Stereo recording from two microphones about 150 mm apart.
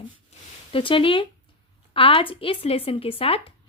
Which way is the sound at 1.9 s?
35° left (ahead or behind).